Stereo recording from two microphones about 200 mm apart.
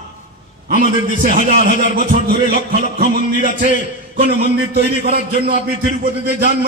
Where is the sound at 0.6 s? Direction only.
45° right (ahead or behind).